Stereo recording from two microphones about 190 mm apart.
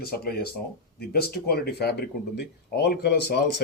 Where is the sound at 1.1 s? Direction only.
55° left (ahead or behind).